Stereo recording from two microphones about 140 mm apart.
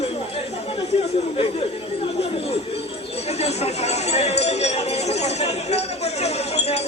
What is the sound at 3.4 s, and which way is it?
Speech, 50° left (ahead or behind).